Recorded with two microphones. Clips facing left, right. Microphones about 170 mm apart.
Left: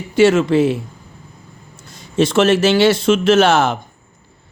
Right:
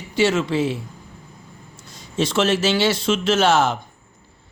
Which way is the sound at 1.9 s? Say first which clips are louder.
Left 6 dB; 55° left (ahead or behind).